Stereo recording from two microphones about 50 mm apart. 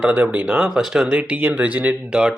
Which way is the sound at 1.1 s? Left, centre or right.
Right.